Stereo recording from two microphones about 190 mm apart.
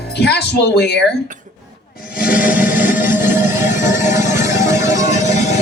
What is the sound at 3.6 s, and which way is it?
Music, 15° right (ahead or behind).